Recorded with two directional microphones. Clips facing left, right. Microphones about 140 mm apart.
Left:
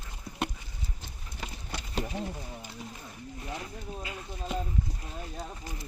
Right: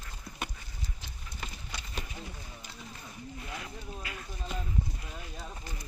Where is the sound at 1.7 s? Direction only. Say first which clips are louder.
Left 11 dB; 60° left (ahead or behind).